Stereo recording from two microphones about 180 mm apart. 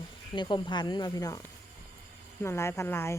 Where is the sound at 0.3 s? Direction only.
25° left (ahead or behind).